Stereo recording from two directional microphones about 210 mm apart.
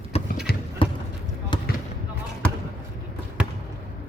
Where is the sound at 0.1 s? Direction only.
30° left (ahead or behind).